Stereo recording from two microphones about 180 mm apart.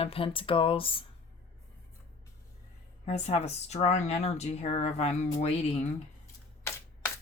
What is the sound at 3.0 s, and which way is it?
Speech, 35° left (ahead or behind).